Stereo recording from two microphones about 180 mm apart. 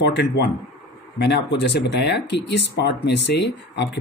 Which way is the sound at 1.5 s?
65° left (ahead or behind).